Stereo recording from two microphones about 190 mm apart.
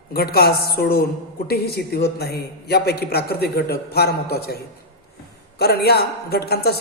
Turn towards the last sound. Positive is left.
turn(degrees=55)  # may be behind; listen again after turning